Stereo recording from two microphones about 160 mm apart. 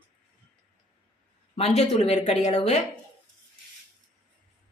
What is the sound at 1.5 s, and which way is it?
A woman's voice, 40° left (ahead or behind).